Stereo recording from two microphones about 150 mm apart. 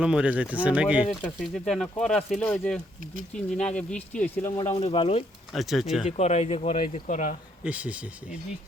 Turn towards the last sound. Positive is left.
turn(degrees=-10)  # may be behind; listen again after turning